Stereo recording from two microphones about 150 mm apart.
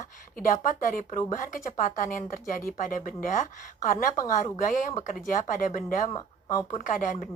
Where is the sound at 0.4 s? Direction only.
60° left (ahead or behind).